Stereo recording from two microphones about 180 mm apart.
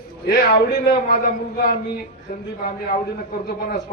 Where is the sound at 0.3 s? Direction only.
65° left (ahead or behind).